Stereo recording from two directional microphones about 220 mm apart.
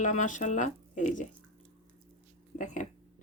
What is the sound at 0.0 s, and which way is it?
Speech, 35° left (ahead or behind).